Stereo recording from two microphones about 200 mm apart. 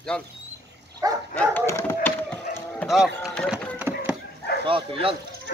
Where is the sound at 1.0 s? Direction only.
15° right (ahead or behind).